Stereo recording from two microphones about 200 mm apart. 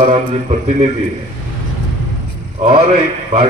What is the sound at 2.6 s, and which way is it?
Speech, 30° right (ahead or behind).